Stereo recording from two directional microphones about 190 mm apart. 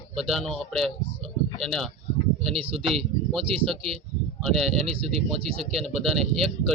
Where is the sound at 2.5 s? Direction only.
30° right (ahead or behind).